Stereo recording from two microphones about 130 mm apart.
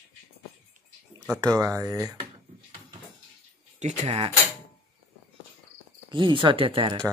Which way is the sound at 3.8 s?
60° right (ahead or behind).